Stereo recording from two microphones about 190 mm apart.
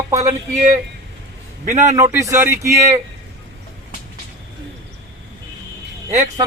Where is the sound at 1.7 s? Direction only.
40° right (ahead or behind).